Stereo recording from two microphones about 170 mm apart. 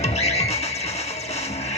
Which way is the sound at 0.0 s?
40° left (ahead or behind).